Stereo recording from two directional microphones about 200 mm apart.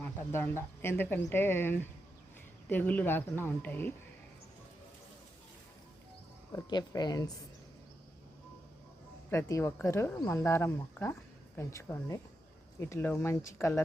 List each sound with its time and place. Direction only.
0.0 s speech: 10° left (ahead or behind)
6.5 s speech: 20° left (ahead or behind)
9.3 s speech: 15° left (ahead or behind)